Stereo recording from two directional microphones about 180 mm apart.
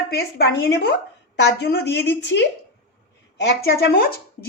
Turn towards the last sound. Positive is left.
turn(degrees=65)  # may be behind; listen again after turning